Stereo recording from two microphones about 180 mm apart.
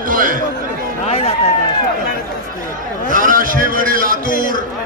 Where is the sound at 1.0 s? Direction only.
35° left (ahead or behind).